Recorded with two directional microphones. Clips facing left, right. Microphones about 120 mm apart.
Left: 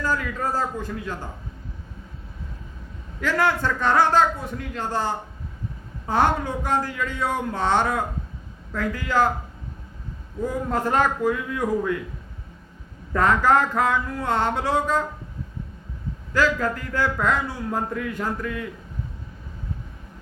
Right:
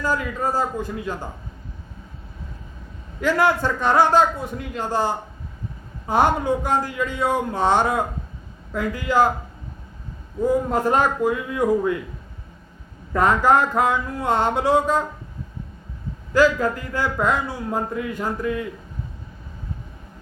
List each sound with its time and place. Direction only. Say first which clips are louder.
0.0 s a man's voice: right 2 dB; 15° right (ahead or behind)
3.2 s a man's voice: right 3 dB; 15° right (ahead or behind)
10.4 s a man's voice: right 5 dB; 15° right (ahead or behind)
13.1 s a man's voice: right 2 dB; 15° right (ahead or behind)
16.3 s a man's voice: right 4 dB; 15° right (ahead or behind)